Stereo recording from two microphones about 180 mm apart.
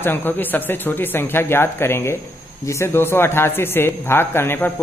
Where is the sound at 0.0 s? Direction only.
10° left (ahead or behind).